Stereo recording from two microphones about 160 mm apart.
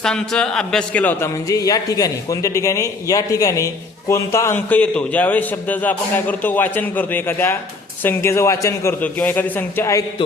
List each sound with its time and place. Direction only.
0.0 s speech: 5° left (ahead or behind)
1.5 s a man's voice: 20° left (ahead or behind)